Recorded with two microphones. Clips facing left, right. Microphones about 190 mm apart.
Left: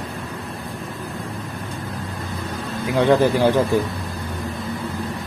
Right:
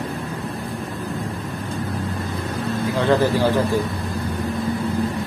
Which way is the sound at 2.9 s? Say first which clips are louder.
Left 3 dB; 15° left (ahead or behind).